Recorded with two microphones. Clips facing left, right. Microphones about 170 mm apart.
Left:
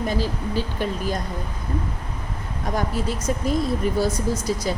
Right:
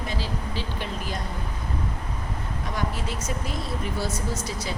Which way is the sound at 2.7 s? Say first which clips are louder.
Left 6 dB; 45° left (ahead or behind).